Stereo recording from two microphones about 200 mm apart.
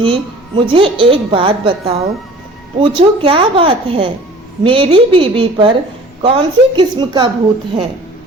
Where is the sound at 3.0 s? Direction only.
25° right (ahead or behind).